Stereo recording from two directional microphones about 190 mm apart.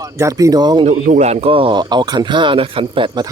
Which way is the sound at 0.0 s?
15° right (ahead or behind).